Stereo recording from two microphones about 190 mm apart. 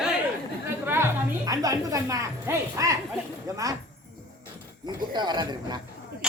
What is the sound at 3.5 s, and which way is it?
Speech, 15° right (ahead or behind).